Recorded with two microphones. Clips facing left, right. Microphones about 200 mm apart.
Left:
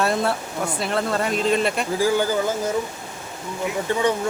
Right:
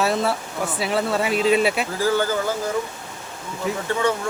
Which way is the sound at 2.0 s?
15° left (ahead or behind).